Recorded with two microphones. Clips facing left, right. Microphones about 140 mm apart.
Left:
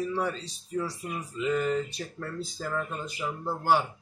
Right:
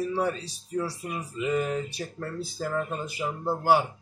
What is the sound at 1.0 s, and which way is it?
Speech, 20° right (ahead or behind).